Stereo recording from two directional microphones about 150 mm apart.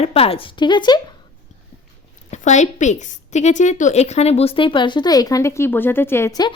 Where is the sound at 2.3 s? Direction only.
50° left (ahead or behind).